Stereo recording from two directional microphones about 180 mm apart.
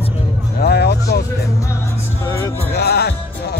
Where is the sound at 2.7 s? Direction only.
65° left (ahead or behind).